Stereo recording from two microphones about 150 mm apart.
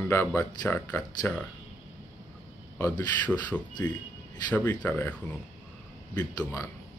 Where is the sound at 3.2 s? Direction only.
10° left (ahead or behind).